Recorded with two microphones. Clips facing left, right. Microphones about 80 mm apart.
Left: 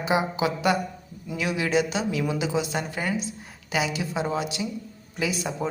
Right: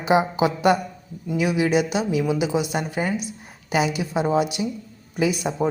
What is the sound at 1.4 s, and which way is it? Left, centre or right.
A woman's voice, centre.